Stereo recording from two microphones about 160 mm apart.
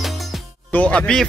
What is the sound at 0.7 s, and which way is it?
Speech, 5° left (ahead or behind).